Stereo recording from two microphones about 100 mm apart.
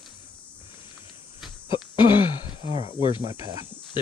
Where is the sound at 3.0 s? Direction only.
60° left (ahead or behind).